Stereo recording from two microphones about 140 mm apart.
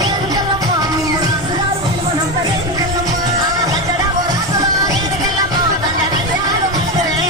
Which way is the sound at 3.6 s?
25° right (ahead or behind).